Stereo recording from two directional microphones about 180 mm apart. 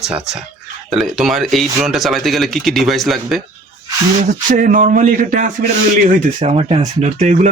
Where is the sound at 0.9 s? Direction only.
Centre (ahead or behind).